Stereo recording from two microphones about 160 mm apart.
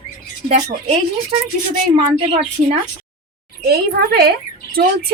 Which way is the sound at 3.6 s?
75° right (ahead or behind).